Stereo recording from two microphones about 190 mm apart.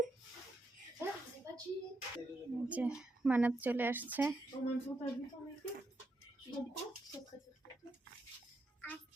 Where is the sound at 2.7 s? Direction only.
5° right (ahead or behind).